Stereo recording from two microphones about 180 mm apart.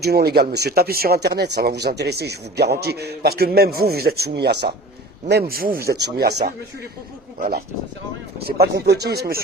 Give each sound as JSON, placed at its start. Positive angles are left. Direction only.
{"t": 0.0, "sound": "speech", "side_deg": -60}
{"t": 7.3, "sound": "speech", "side_deg": -55}